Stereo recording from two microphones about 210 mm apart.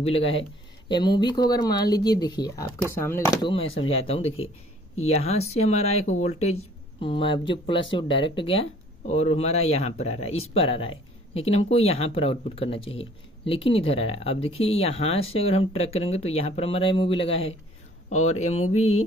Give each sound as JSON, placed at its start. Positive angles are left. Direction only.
{"t": 0.0, "sound": "speech", "side_deg": 30}
{"t": 5.0, "sound": "speech", "side_deg": 30}
{"t": 18.8, "sound": "mantra", "side_deg": 90}